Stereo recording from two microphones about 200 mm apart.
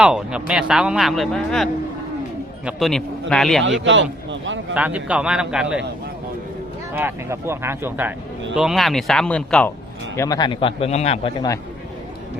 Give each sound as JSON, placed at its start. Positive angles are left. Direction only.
{"t": 0.0, "sound": "speech", "side_deg": -5}
{"t": 3.6, "sound": "a man's voice", "side_deg": -70}
{"t": 4.7, "sound": "speech", "side_deg": -5}
{"t": 6.9, "sound": "speech", "side_deg": -10}
{"t": 10.2, "sound": "a man's voice", "side_deg": 20}